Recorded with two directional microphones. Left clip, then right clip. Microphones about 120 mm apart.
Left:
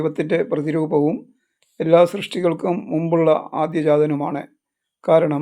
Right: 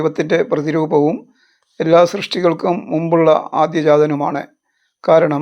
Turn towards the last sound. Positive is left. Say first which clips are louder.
# right 4 dB
turn(degrees=5)  # may be behind; listen again after turning